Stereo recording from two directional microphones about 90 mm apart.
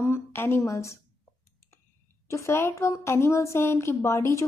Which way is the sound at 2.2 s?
30° left (ahead or behind).